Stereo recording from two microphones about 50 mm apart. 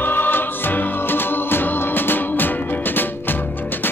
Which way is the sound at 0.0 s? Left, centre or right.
Left.